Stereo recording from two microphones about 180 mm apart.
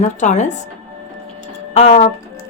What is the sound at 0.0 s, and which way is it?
Speech, 40° left (ahead or behind).